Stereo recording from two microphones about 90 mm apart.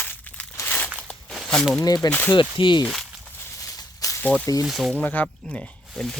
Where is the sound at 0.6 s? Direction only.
20° left (ahead or behind).